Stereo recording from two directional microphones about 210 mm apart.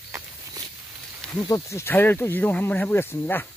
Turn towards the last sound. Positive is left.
turn(degrees=10)  # may be behind; listen again after turning